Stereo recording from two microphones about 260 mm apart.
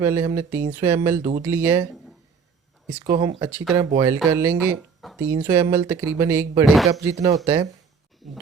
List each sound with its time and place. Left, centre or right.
0.0 s speech: centre
3.1 s speech: right
6.7 s speech: centre
7.4 s speech: centre
8.2 s speech: centre